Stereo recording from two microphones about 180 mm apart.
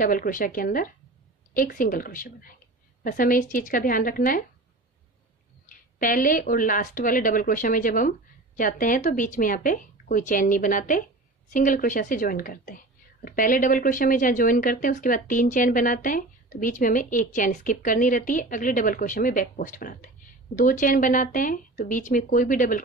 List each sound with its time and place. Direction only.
0.0 s a woman's voice: 50° left (ahead or behind)
5.9 s a woman's voice: 50° left (ahead or behind)